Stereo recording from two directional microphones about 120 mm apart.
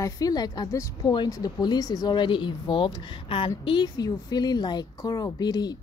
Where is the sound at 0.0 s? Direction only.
30° left (ahead or behind).